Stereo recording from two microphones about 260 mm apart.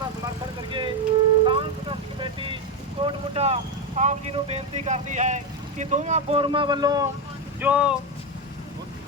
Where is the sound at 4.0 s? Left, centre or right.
Right; by 8.0 s centre.